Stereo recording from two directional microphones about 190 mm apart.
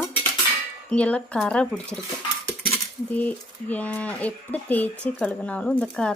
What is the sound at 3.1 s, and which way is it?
A woman's voice, 10° left (ahead or behind).